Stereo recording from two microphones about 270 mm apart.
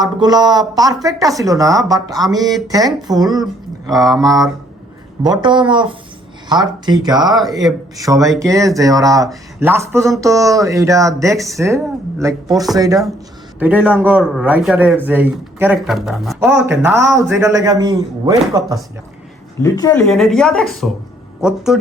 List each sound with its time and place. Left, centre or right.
0.0 s a man's voice: centre
7.3 s a woman's voice: centre
8.0 s a man's voice: centre
19.8 s a woman's voice: centre